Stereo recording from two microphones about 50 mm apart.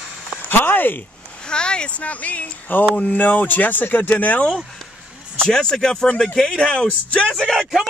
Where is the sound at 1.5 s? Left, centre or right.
Centre.